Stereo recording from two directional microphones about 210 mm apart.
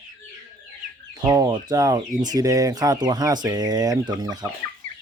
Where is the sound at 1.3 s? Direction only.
15° right (ahead or behind).